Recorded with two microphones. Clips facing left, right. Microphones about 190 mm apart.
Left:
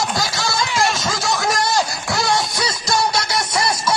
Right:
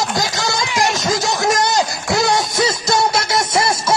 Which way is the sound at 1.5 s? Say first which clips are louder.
Right 4 dB; 20° right (ahead or behind).